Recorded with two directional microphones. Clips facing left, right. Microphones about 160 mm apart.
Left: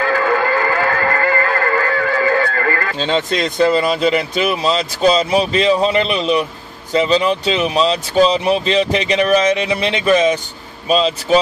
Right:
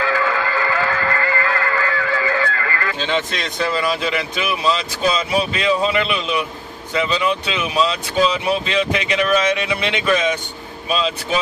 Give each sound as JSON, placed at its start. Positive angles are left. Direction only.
{"t": 0.0, "sound": "music", "side_deg": 45}
{"t": 6.9, "sound": "speech", "side_deg": 35}